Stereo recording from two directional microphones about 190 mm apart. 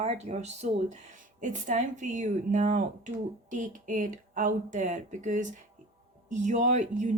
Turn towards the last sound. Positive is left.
turn(degrees=-40)  # may be behind; listen again after turning